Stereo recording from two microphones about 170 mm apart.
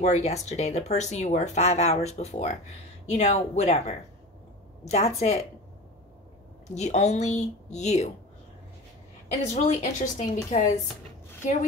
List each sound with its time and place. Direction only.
0.0 s speech: 40° left (ahead or behind)
6.7 s a woman's voice: 40° left (ahead or behind)
9.5 s a woman's voice: 45° left (ahead or behind)